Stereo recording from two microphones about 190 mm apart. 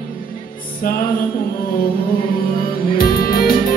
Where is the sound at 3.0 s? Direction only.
50° left (ahead or behind).